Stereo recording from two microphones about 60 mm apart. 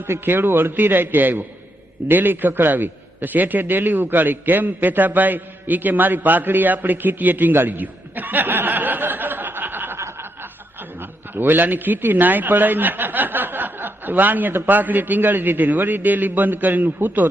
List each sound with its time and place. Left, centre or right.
0.0 s a man's voice: right
11.0 s a man's voice: right